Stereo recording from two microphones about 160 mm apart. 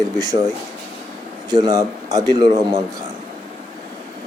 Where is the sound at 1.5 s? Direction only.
25° right (ahead or behind).